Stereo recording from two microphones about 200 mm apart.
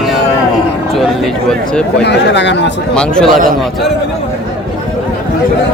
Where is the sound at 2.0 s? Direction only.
60° left (ahead or behind).